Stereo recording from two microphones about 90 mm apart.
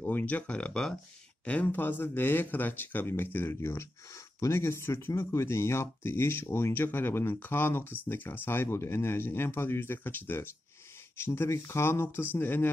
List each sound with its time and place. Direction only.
0.0 s speech: 20° left (ahead or behind)